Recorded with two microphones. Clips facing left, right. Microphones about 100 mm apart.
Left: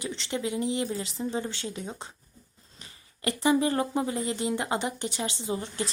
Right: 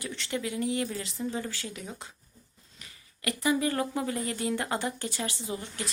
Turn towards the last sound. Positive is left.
turn(degrees=30)  # may be behind; listen again after turning